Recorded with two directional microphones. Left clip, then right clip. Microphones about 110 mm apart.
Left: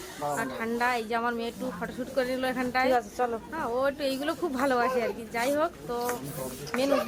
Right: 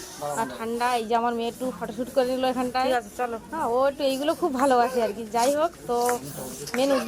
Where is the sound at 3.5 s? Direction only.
20° right (ahead or behind).